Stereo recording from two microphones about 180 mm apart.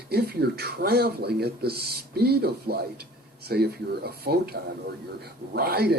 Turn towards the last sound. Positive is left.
turn(degrees=-60)  # may be behind; listen again after turning